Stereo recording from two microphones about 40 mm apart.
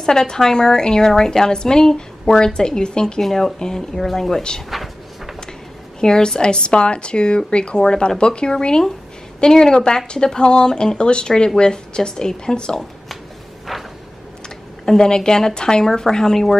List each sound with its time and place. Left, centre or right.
0.0 s a woman's voice: centre
3.2 s a woman's voice: centre
4.6 s drawer open or close: centre
5.9 s a woman's voice: centre
13.7 s a sound: centre
14.9 s a woman's voice: centre